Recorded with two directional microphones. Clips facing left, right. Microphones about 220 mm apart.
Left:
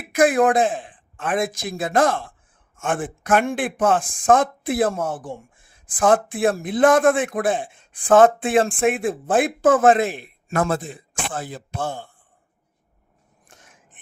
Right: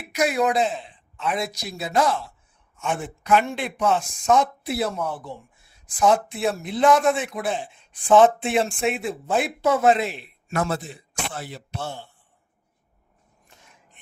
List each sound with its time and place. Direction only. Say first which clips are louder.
0.1 s speech: left 5 dB; 50° left (ahead or behind)